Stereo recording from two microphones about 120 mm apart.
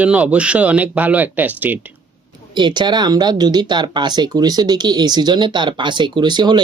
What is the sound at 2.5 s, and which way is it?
Speech, 40° right (ahead or behind).